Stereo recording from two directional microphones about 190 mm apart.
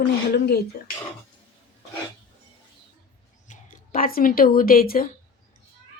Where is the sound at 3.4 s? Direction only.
50° left (ahead or behind).